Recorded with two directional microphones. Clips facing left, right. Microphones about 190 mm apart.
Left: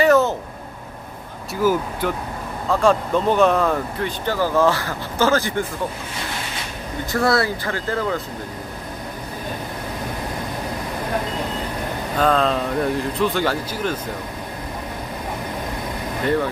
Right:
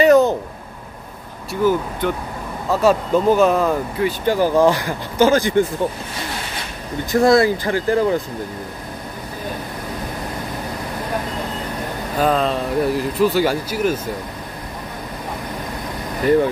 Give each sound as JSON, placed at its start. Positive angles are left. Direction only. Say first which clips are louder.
{"t": 0.0, "sound": "a sound", "louder": "right 3 dB", "side_deg": -15}
{"t": 1.5, "sound": "speech", "louder": "right 2 dB", "side_deg": 5}
{"t": 2.7, "sound": "speech", "louder": "right 2 dB", "side_deg": -5}
{"t": 4.3, "sound": "speech", "louder": "right 3 dB", "side_deg": -15}
{"t": 7.1, "sound": "speech", "louder": "right 6 dB", "side_deg": -15}
{"t": 12.2, "sound": "speech", "louder": "right 1 dB", "side_deg": -5}